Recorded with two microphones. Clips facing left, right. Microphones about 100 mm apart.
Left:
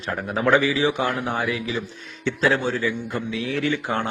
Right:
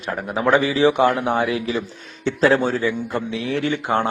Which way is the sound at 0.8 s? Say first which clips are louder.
Right 6 dB; 65° right (ahead or behind).